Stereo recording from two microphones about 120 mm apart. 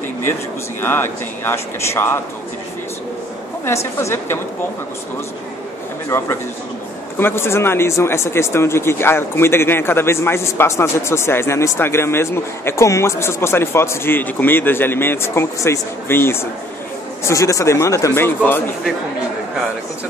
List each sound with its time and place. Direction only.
0.3 s speech: 20° left (ahead or behind)
3.6 s speech: 20° left (ahead or behind)
6.0 s speech: 25° left (ahead or behind)